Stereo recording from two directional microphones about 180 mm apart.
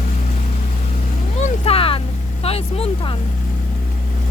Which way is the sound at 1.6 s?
30° left (ahead or behind).